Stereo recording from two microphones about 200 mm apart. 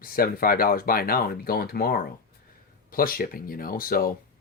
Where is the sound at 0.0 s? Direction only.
45° left (ahead or behind).